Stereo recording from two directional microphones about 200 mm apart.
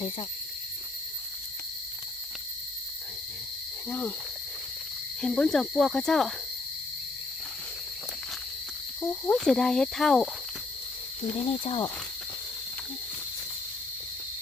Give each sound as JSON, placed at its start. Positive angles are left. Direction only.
{"t": 3.8, "sound": "cricket", "side_deg": 10}
{"t": 5.2, "sound": "speech", "side_deg": 5}
{"t": 9.0, "sound": "speech", "side_deg": 10}
{"t": 11.6, "sound": "speech", "side_deg": 25}